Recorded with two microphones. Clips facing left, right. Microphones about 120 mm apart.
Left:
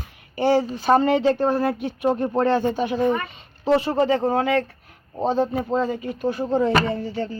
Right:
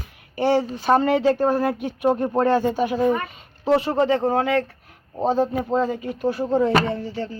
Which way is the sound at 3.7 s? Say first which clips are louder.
Even; centre (ahead or behind).